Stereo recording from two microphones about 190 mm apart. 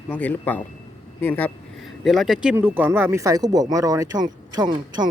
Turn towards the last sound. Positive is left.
turn(degrees=-20)  # may be behind; listen again after turning